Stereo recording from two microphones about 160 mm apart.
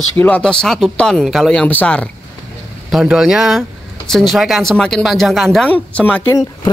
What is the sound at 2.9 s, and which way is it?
Speech, 5° right (ahead or behind).